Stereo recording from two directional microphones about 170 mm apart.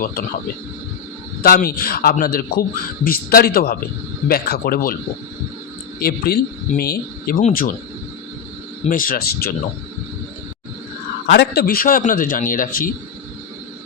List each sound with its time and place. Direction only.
0.0 s a man's voice: 60° left (ahead or behind)
1.4 s a man's voice: 60° left (ahead or behind)
6.0 s a man's voice: 65° left (ahead or behind)
8.9 s a man's voice: 55° left (ahead or behind)
11.3 s a man's voice: 75° left (ahead or behind); by 12.9 s 55° left (ahead or behind)